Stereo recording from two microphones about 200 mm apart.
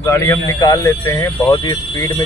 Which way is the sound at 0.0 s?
15° left (ahead or behind).